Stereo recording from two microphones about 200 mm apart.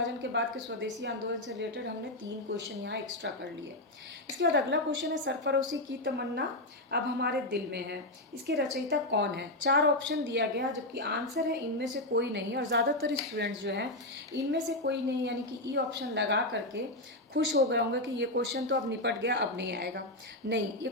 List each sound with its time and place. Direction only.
0.0 s a woman's voice: 60° right (ahead or behind)
4.4 s a woman's voice: 60° right (ahead or behind)
6.9 s a woman's voice: 55° right (ahead or behind)